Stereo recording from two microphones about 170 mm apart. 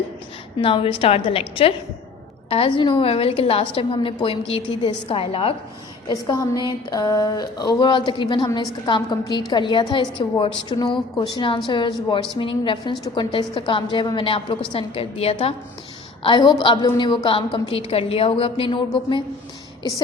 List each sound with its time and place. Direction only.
0.6 s a woman's voice: 30° left (ahead or behind)
6.1 s a woman's voice: 20° left (ahead or behind)